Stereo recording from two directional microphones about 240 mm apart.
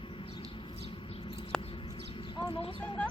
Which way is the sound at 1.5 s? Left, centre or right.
Centre.